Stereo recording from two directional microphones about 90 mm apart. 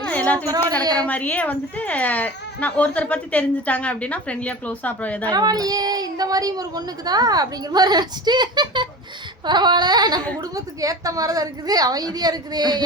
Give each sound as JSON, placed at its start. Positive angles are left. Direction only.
{"t": 0.1, "sound": "a sound", "side_deg": 15}
{"t": 0.9, "sound": "speech", "side_deg": 15}
{"t": 5.3, "sound": "speech", "side_deg": -45}
{"t": 10.5, "sound": "speech", "side_deg": -40}